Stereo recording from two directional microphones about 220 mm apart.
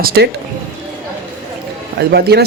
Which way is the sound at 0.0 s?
45° right (ahead or behind).